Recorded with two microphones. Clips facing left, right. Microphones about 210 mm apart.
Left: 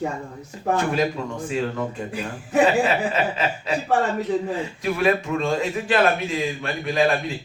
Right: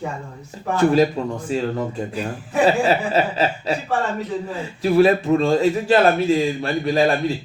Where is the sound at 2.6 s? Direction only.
35° right (ahead or behind).